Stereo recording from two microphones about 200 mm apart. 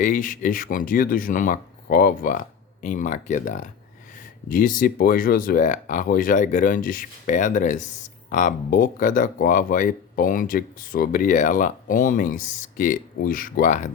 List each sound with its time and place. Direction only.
0.0 s speech: 40° left (ahead or behind)